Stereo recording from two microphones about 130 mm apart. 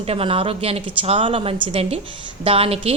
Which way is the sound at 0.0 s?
45° right (ahead or behind).